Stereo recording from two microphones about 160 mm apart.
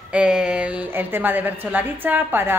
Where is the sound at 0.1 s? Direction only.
5° right (ahead or behind).